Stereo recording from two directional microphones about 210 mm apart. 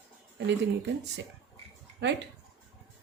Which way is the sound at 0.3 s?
55° right (ahead or behind).